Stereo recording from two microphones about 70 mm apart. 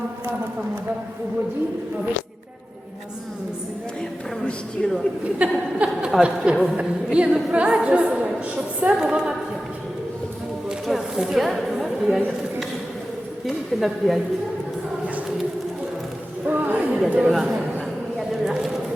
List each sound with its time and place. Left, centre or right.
5.4 s a woman's voice: centre
10.8 s speech: centre
13.7 s speech: centre
16.5 s a sound: right
17.2 s a woman's voice: centre
18.2 s a sound: centre